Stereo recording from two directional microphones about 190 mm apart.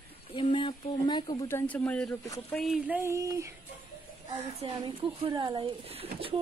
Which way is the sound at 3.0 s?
15° right (ahead or behind).